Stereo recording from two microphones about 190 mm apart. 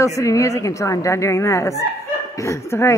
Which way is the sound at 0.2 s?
15° left (ahead or behind).